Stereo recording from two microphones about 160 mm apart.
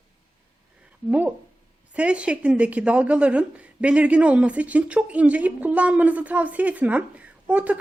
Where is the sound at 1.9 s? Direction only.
5° right (ahead or behind).